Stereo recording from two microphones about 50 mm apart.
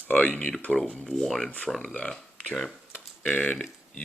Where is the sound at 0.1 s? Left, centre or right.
Left.